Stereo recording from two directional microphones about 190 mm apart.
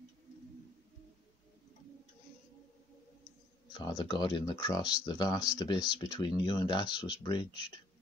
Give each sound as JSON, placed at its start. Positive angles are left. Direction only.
{"t": 3.7, "sound": "speech", "side_deg": 25}